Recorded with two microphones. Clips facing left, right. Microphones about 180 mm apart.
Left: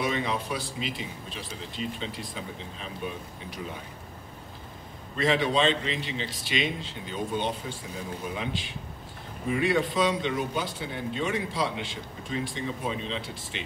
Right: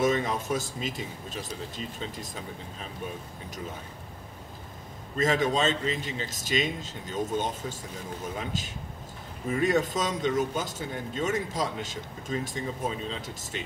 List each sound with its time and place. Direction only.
0.0 s a man's voice: 45° right (ahead or behind)
5.1 s a man's voice: 45° right (ahead or behind)